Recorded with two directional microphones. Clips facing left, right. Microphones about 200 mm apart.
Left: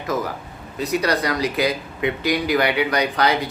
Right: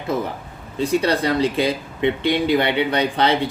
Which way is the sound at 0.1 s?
30° right (ahead or behind).